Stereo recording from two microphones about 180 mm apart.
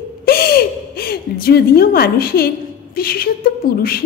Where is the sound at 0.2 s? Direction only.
60° left (ahead or behind).